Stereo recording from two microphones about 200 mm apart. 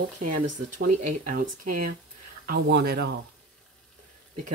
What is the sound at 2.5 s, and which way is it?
Speech, 50° right (ahead or behind).